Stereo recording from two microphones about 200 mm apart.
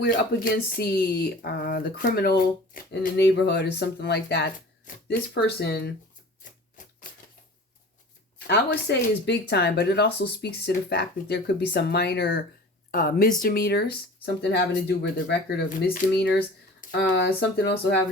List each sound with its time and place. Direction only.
0.0 s speech: 50° left (ahead or behind)
8.4 s speech: 55° left (ahead or behind)
12.9 s speech: 45° left (ahead or behind)